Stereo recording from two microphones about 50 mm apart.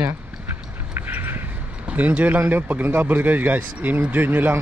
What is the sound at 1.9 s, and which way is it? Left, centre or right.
Speech, right.